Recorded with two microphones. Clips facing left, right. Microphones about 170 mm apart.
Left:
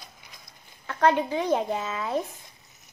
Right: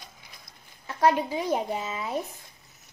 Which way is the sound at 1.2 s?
10° right (ahead or behind).